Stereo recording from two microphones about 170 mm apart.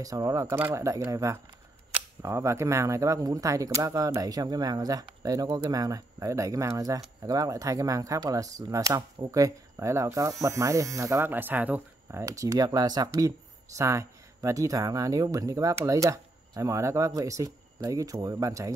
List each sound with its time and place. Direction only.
0.0 s speech: 20° right (ahead or behind)